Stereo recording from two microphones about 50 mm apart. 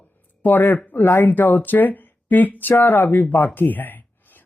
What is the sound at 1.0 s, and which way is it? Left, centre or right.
Speech, left.